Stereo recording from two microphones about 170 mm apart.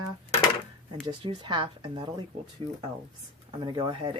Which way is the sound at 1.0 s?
25° right (ahead or behind).